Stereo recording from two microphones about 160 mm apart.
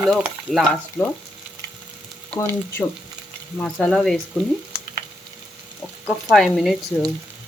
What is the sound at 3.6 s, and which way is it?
Speech, 5° left (ahead or behind).